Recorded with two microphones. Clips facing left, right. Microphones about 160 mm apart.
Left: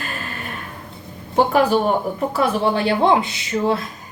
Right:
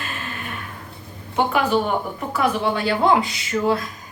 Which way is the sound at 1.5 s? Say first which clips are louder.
Left 3 dB; 35° left (ahead or behind).